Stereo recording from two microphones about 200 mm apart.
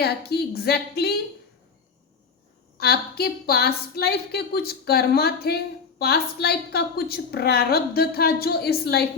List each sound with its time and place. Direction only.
0.0 s a woman's voice: 55° left (ahead or behind)
2.7 s a woman's voice: 50° left (ahead or behind)